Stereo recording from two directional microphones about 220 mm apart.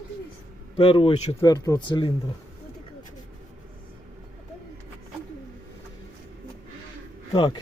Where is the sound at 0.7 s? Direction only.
25° left (ahead or behind).